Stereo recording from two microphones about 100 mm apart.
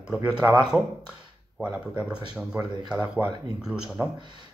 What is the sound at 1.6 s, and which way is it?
Speech, 10° right (ahead or behind).